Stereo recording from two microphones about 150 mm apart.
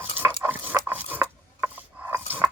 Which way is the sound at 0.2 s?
15° right (ahead or behind).